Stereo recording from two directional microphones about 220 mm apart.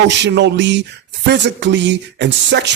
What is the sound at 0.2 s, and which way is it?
Speech, 50° right (ahead or behind).